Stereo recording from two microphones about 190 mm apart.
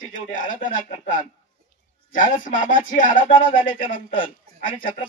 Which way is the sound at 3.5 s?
25° left (ahead or behind).